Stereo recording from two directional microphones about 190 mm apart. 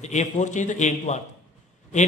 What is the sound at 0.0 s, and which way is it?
Speech, 40° left (ahead or behind).